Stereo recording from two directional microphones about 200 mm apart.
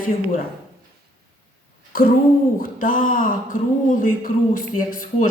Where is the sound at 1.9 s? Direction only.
45° left (ahead or behind).